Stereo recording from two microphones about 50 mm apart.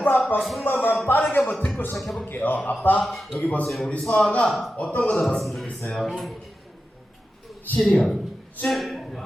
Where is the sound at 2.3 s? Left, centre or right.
Left.